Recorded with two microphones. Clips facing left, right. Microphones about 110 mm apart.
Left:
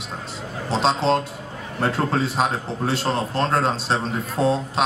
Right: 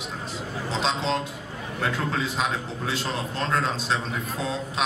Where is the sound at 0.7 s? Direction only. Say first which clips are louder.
Left 7 dB; 30° left (ahead or behind).